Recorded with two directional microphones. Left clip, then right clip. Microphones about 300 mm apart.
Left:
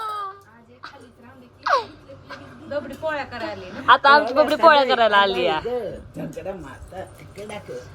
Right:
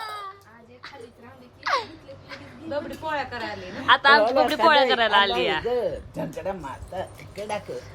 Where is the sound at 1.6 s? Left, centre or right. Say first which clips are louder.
Left 5 dB; centre.